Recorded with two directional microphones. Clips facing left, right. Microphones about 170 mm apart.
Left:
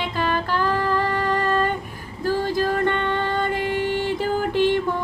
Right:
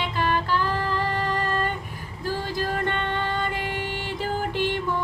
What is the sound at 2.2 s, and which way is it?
Music, 45° left (ahead or behind).